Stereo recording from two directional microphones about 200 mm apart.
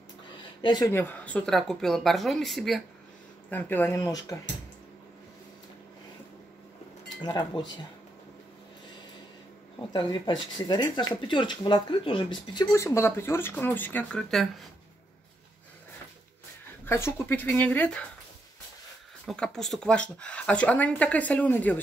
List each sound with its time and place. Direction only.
0.6 s speech: 20° left (ahead or behind)
7.6 s speech: 25° left (ahead or behind)
9.9 s speech: 25° left (ahead or behind); by 14.5 s centre (ahead or behind)
16.8 s speech: 10° left (ahead or behind)
19.2 s speech: 5° left (ahead or behind)